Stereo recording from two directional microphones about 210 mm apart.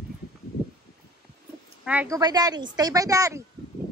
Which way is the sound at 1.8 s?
10° right (ahead or behind).